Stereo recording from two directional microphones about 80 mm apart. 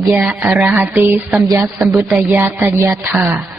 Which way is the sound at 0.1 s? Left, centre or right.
Right.